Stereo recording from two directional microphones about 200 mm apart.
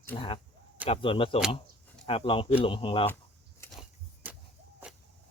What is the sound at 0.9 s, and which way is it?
Speech, 25° left (ahead or behind).